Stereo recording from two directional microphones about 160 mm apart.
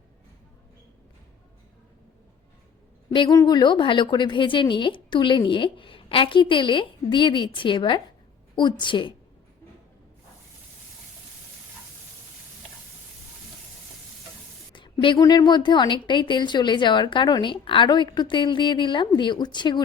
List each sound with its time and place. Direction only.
3.1 s a woman's voice: 25° left (ahead or behind)
14.7 s a woman's voice: 30° left (ahead or behind)